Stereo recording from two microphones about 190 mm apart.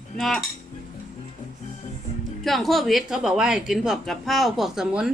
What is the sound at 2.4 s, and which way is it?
Speech, centre (ahead or behind).